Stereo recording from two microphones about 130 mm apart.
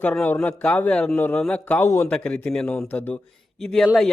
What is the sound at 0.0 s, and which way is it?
Speech, 10° left (ahead or behind).